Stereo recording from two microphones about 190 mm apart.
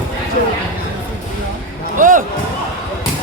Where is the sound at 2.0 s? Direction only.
45° right (ahead or behind).